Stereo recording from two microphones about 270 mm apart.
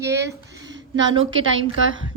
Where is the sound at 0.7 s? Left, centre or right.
Right.